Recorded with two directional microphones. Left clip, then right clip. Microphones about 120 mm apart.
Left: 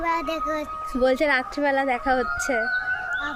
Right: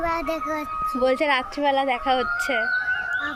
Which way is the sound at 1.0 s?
40° left (ahead or behind).